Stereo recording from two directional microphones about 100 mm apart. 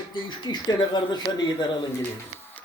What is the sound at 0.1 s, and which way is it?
Speech, 50° left (ahead or behind).